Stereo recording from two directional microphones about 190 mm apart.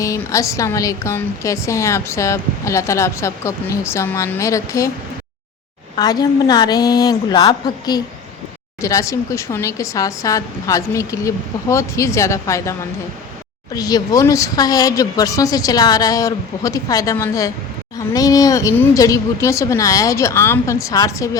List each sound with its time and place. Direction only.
0.0 s a woman's voice: 15° left (ahead or behind)
6.0 s a woman's voice: 20° left (ahead or behind)
13.7 s a woman's voice: 20° left (ahead or behind)